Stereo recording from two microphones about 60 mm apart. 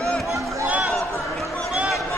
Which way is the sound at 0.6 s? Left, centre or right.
Right.